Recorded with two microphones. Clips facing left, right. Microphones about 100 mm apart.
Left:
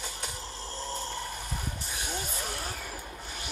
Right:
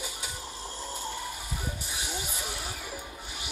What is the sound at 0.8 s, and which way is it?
Snoring, 15° right (ahead or behind).